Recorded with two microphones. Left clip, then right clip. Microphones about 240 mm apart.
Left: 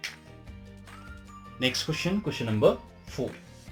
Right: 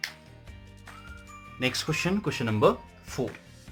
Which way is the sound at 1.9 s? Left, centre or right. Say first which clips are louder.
Right 2 dB; right.